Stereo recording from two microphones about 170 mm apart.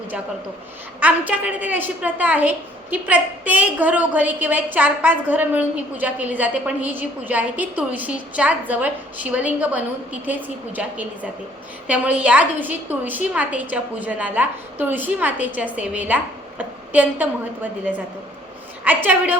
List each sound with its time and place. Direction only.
0.9 s a woman's voice: 10° right (ahead or behind)
18.9 s a woman's voice: 10° right (ahead or behind)